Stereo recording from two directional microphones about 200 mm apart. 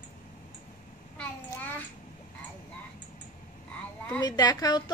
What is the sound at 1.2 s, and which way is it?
Child singing, 10° left (ahead or behind).